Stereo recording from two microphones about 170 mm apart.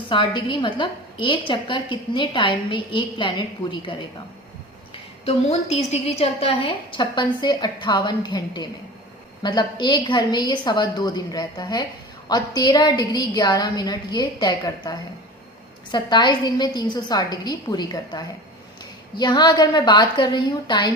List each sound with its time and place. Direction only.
0.1 s a woman's voice: 30° left (ahead or behind)
5.2 s a woman's voice: 40° left (ahead or behind)